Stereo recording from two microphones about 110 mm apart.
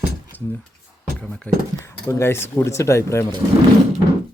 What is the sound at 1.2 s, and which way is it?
Speech, 10° left (ahead or behind).